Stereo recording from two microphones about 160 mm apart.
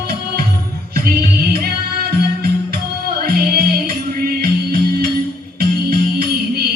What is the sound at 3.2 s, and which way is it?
Music, 70° right (ahead or behind).